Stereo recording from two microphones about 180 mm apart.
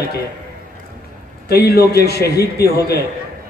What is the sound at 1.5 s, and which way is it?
A man's voice, 60° left (ahead or behind).